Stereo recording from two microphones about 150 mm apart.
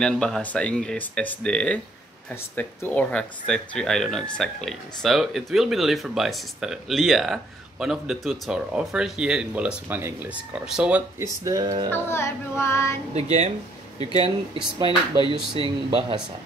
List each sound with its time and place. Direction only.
0.0 s speech: 5° left (ahead or behind)
11.4 s music: 25° right (ahead or behind)
11.9 s speech: 15° left (ahead or behind)
13.1 s speech: 45° right (ahead or behind)
14.9 s speech: 30° left (ahead or behind)